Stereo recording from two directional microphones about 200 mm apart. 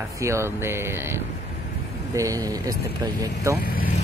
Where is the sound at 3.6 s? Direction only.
50° left (ahead or behind).